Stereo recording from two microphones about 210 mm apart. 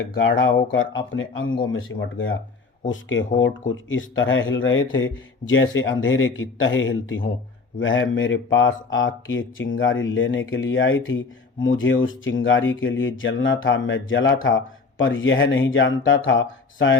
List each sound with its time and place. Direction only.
0.3 s speech: 65° left (ahead or behind)